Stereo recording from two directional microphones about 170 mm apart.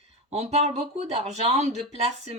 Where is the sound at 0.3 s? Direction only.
40° right (ahead or behind).